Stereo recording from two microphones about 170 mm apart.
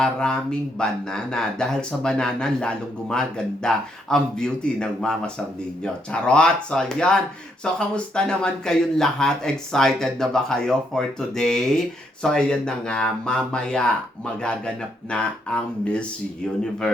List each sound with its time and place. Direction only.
0.0 s speech: 5° left (ahead or behind)